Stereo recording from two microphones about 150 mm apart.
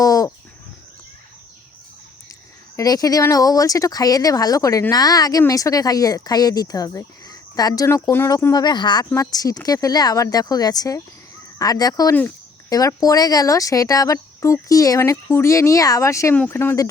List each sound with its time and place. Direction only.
0.0 s bird: 20° left (ahead or behind)
2.7 s speech: 25° left (ahead or behind)